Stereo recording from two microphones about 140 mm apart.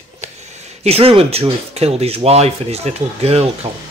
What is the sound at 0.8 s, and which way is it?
Speech, 45° right (ahead or behind).